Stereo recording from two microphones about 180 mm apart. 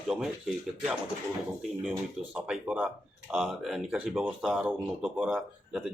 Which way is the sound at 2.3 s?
5° right (ahead or behind).